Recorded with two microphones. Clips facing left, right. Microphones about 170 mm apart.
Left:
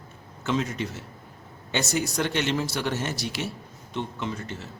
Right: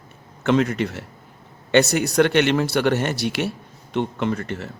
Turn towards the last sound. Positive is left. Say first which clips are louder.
# right 8 dB
turn(degrees=-65)  # may be behind; listen again after turning